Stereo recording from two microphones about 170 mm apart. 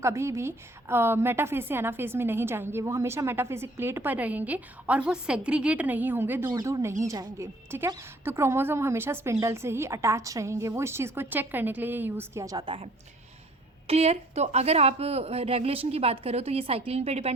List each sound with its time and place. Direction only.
0.0 s a woman's voice: 15° right (ahead or behind); by 17.3 s 40° right (ahead or behind)